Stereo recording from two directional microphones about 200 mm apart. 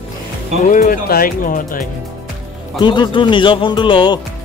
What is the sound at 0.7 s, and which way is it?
Speech, 40° left (ahead or behind).